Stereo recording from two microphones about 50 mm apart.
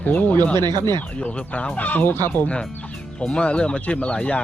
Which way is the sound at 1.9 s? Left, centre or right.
Left.